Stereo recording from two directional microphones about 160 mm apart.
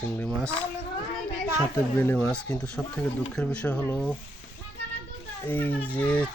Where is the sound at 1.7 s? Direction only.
15° left (ahead or behind).